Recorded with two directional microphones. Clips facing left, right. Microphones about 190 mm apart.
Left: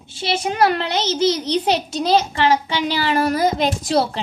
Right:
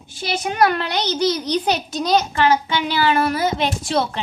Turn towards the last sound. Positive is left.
turn(degrees=35)  # may be behind; listen again after turning